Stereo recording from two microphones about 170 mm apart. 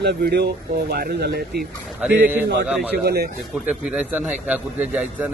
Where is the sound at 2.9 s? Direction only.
70° right (ahead or behind).